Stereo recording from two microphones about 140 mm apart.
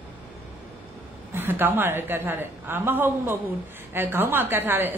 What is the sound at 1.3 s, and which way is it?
A woman's voice, 15° right (ahead or behind).